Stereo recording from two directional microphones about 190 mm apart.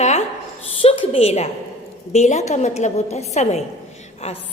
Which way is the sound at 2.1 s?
35° left (ahead or behind).